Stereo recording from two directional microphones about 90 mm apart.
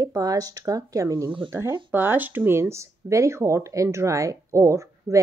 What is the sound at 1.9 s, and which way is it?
Speech, 20° right (ahead or behind).